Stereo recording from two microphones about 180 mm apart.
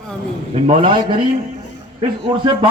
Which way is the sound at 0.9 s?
25° right (ahead or behind).